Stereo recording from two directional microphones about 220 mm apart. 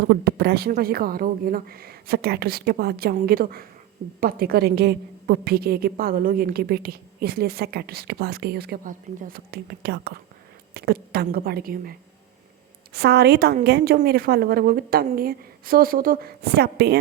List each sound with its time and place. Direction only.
0.1 s a woman's voice: 45° right (ahead or behind)